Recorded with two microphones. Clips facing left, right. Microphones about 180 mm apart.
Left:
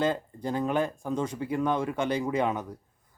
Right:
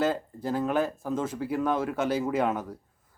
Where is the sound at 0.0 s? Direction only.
5° right (ahead or behind).